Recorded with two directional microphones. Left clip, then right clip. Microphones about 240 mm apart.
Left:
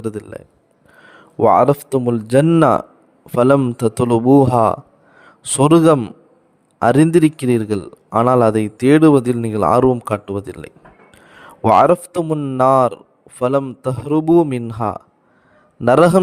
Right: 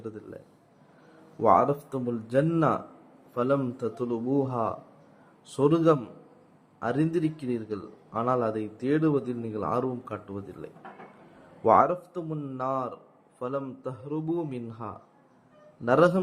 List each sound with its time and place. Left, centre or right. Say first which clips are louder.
0.0 s a man's voice: left 14 dB; left